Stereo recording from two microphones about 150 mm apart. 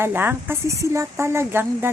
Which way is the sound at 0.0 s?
15° right (ahead or behind).